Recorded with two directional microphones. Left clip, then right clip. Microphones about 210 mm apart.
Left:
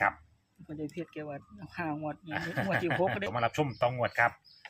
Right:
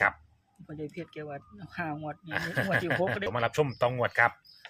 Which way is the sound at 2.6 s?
55° right (ahead or behind).